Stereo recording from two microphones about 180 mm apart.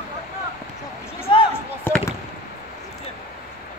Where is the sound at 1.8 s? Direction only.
10° left (ahead or behind).